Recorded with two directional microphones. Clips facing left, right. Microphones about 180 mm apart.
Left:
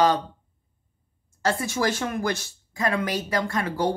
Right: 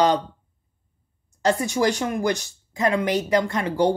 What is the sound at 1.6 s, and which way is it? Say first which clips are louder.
Speech: right 4 dB; 15° right (ahead or behind).